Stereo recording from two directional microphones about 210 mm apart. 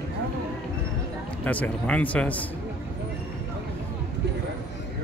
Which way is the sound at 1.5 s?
5° left (ahead or behind).